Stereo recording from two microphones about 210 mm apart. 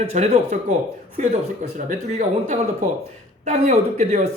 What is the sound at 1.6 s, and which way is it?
Speech, 35° right (ahead or behind).